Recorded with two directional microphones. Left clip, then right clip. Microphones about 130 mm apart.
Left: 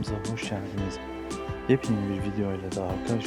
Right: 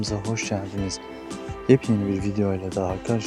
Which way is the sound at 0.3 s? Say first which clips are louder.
Right 5 dB; 40° right (ahead or behind).